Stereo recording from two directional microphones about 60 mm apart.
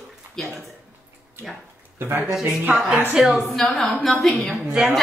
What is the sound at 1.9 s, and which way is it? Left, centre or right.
Speech, right.